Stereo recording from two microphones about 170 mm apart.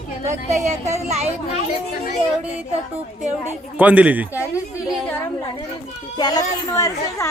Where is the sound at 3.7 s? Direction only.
10° right (ahead or behind).